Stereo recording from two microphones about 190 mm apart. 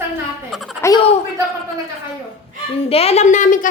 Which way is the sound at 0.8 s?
15° left (ahead or behind).